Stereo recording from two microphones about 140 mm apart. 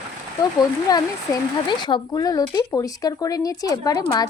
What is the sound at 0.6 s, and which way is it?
Speech, 30° left (ahead or behind).